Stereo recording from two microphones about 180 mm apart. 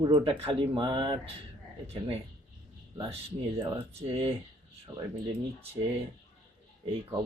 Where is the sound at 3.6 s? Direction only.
30° right (ahead or behind).